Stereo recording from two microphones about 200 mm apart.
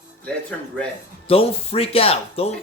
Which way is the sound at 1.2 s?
30° left (ahead or behind).